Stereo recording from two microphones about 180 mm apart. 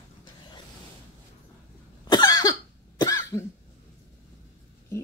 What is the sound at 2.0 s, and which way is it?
Cough, 20° left (ahead or behind).